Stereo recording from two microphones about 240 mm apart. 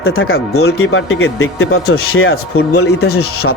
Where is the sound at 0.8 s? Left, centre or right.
Left.